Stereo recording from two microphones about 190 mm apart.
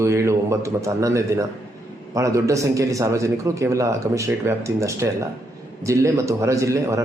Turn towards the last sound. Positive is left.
turn(degrees=-15)  # may be behind; listen again after turning